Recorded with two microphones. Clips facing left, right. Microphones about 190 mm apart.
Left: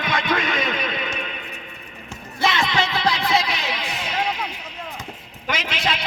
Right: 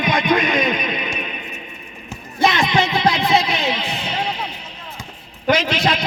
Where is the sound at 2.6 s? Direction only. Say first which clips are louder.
Right 4 dB; 20° right (ahead or behind).